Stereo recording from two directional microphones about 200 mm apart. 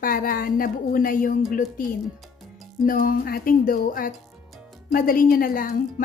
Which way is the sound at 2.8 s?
45° left (ahead or behind).